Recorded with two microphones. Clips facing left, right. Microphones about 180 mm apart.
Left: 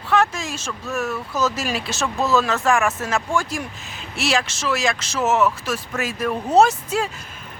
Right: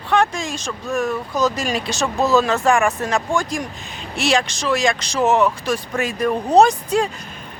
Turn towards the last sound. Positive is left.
turn(degrees=5)  # may be behind; listen again after turning